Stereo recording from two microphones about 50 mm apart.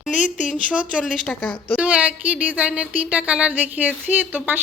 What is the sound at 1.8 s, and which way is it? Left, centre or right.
Speech, right.